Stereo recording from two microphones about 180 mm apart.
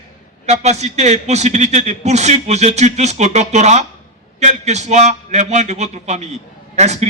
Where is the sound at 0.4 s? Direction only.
40° right (ahead or behind).